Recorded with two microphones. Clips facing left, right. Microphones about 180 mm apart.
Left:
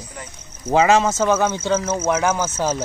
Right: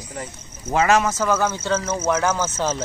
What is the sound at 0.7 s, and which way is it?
Speech, 25° left (ahead or behind).